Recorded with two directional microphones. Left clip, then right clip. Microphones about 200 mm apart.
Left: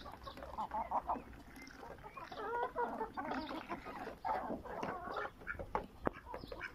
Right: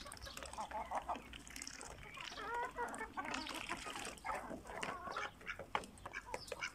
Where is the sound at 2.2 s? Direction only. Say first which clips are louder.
Left 3 dB; 10° left (ahead or behind).